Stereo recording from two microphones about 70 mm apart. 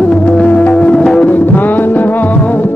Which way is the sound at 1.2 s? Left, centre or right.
Left.